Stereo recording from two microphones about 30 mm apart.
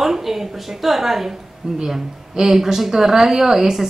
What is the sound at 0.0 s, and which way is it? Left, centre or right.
A woman's voice, centre.